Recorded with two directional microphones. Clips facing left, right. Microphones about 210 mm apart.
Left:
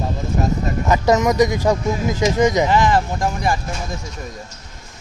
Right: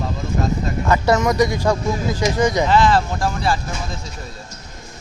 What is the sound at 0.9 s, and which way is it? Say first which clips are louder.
Speech: left 1 dB; 15° left (ahead or behind).